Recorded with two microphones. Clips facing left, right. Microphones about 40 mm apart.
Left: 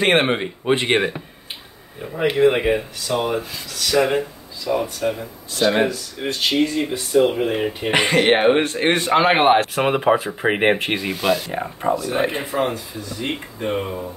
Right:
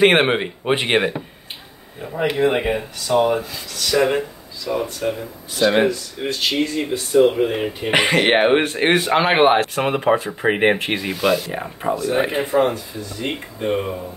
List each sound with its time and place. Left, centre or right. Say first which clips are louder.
0.0 s speech: right 3 dB; centre
2.3 s speech: left 3 dB; centre
5.7 s speech: right 2 dB; centre
6.2 s speech: left 1 dB; centre
7.9 s speech: right 1 dB; centre
8.9 s speech: even; centre